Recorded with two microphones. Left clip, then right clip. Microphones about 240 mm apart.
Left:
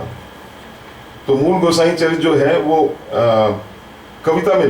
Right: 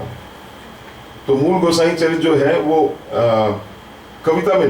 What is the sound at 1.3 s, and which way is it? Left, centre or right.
A man's voice, centre.